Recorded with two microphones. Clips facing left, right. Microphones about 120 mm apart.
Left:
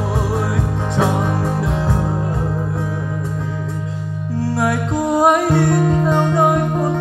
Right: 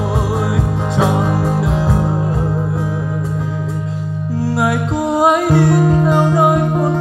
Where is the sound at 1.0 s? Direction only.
15° right (ahead or behind).